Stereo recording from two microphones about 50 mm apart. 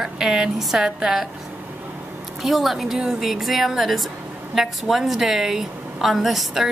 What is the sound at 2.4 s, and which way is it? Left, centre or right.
A woman's voice, centre.